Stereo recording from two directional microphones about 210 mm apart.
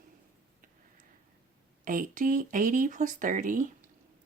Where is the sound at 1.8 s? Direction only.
40° right (ahead or behind).